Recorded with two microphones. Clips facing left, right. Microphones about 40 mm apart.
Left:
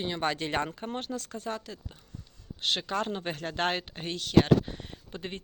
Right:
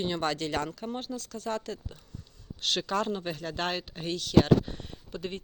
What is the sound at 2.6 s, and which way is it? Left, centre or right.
Speech, left.